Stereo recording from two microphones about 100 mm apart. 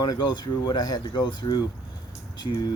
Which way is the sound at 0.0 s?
40° left (ahead or behind).